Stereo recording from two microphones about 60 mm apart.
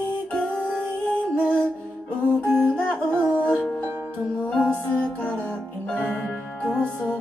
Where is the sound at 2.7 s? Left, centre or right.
Centre.